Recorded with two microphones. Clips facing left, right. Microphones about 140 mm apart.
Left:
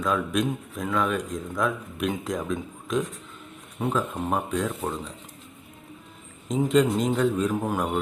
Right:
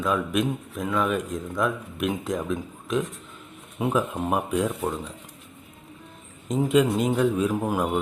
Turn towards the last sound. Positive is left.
turn(degrees=-5)  # may be behind; listen again after turning